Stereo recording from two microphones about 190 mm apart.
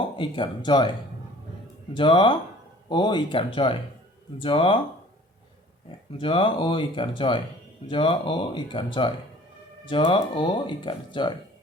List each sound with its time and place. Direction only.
0.2 s speech: 25° left (ahead or behind)
6.1 s speech: 25° left (ahead or behind)